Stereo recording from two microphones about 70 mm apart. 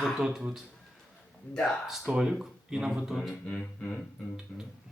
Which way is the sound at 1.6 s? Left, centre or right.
Centre.